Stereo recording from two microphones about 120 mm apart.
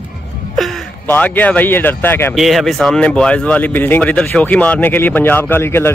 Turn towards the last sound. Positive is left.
turn(degrees=20)  # may be behind; listen again after turning